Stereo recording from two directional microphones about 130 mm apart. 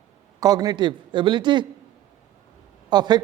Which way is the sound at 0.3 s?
30° right (ahead or behind).